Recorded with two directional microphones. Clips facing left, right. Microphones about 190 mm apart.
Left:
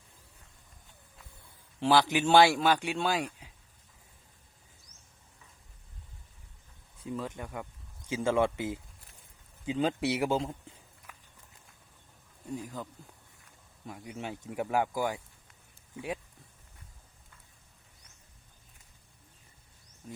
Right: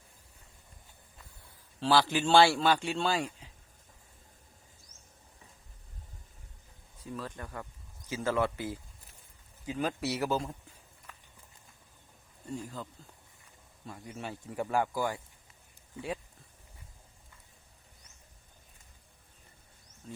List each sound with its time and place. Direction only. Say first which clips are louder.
1.8 s a man's voice: left 2 dB; 15° left (ahead or behind)
7.0 s a man's voice: left 4 dB; 20° left (ahead or behind)
11.1 s run: even; 10° left (ahead or behind)
12.5 s a man's voice: left 1 dB; 15° left (ahead or behind)
20.0 s a sound: even; 10° left (ahead or behind)